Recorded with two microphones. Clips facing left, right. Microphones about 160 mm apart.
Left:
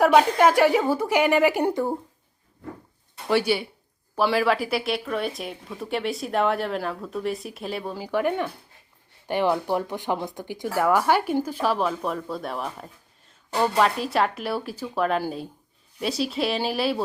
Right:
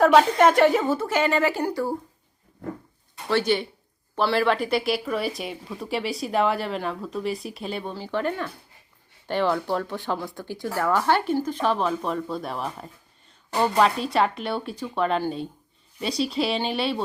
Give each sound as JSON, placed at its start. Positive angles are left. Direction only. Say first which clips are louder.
{"t": 0.0, "sound": "speech", "louder": "right 1 dB", "side_deg": 5}
{"t": 3.2, "sound": "speech", "louder": "even", "side_deg": 10}